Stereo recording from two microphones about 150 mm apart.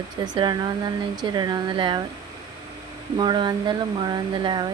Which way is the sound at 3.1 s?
30° right (ahead or behind).